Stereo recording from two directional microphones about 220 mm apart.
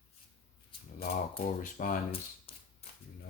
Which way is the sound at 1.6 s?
35° left (ahead or behind).